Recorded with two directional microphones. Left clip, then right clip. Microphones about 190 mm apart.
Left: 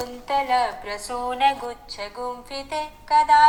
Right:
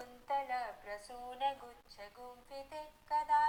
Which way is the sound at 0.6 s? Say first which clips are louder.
Left 18 dB; 35° left (ahead or behind).